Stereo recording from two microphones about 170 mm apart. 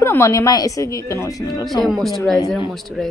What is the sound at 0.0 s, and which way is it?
A woman's voice, 15° left (ahead or behind).